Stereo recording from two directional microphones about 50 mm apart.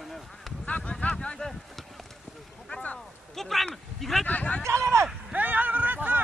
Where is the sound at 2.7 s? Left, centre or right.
Left.